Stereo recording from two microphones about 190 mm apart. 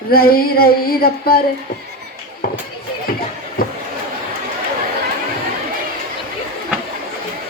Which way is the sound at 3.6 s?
50° left (ahead or behind).